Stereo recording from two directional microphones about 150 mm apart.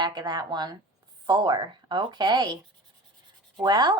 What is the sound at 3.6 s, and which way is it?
Speech, 30° right (ahead or behind).